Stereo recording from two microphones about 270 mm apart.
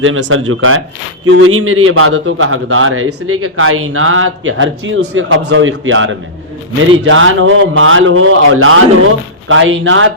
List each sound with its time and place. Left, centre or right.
0.0 s a man's voice: right